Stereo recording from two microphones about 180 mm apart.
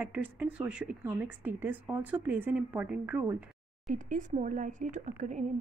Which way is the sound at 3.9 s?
45° right (ahead or behind).